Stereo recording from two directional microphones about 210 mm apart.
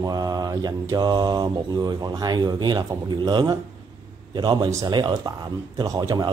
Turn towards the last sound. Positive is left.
turn(degrees=-15)  # may be behind; listen again after turning